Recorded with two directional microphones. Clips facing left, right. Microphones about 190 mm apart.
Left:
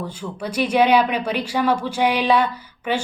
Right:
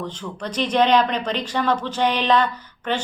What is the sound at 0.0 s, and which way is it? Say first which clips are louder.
Speech: left 1 dB; 10° left (ahead or behind).